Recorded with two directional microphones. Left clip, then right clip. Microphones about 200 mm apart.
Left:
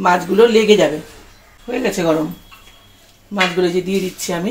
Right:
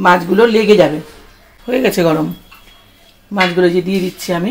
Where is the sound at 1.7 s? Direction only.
55° right (ahead or behind).